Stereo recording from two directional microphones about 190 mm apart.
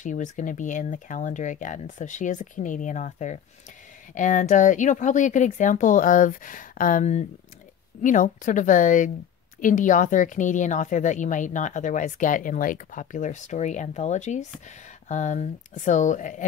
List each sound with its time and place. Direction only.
0.0 s a woman's voice: 40° left (ahead or behind)